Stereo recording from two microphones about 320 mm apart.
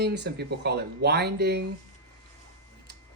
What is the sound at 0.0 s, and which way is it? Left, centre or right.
Speech, right.